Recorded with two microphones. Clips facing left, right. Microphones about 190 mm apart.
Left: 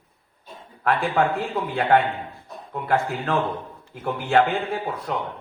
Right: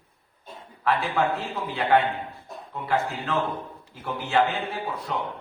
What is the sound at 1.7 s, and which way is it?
Speech, 50° left (ahead or behind).